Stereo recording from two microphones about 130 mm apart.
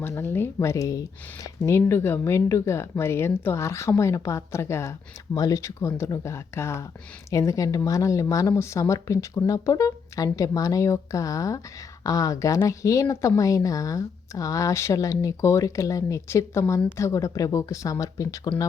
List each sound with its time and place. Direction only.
0.0 s speech: 15° left (ahead or behind)